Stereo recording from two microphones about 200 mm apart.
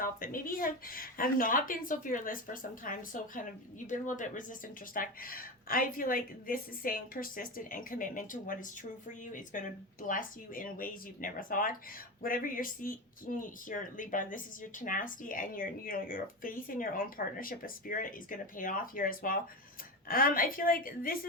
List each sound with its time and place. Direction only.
0.0 s speech: 45° left (ahead or behind)